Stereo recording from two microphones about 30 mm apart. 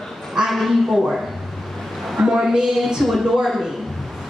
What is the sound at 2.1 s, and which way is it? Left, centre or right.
Speech, centre.